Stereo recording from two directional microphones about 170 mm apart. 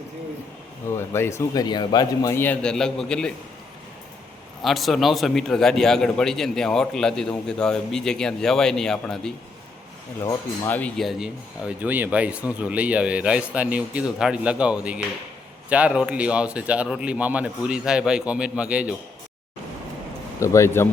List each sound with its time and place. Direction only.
0.9 s a man's voice: 15° left (ahead or behind)
4.6 s a man's voice: centre (ahead or behind)
10.2 s speech: 20° left (ahead or behind)
10.8 s speech: 5° left (ahead or behind)
20.4 s a man's voice: 15° left (ahead or behind)